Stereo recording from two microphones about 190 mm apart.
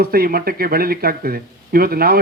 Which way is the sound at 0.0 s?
50° right (ahead or behind).